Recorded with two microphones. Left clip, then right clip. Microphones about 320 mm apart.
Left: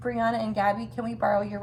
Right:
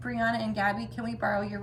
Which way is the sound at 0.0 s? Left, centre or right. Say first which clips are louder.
Left 3 dB; centre.